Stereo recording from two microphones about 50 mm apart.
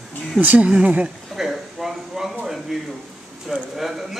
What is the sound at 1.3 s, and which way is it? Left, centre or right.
Speech, centre.